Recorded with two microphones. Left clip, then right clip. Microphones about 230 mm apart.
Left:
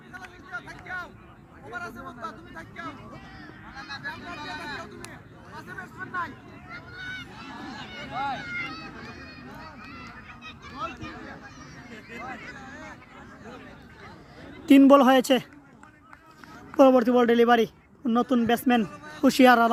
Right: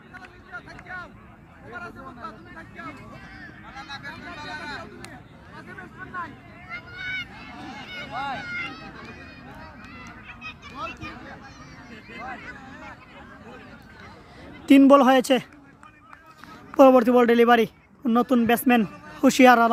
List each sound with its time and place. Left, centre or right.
0.1 s vehicle: left
1.7 s speech: left
3.7 s honk: right
4.4 s speech: right
5.5 s speech: left
6.7 s speech: right
7.9 s a sound: right
8.4 s speech: right
10.8 s speech: centre
12.2 s speech: right
14.7 s speech: centre
16.7 s speech: centre